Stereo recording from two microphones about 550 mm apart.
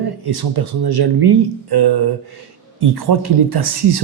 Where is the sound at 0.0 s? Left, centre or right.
Right.